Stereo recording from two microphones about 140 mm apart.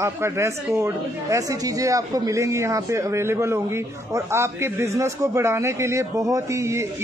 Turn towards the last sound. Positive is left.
turn(degrees=-20)  # may be behind; listen again after turning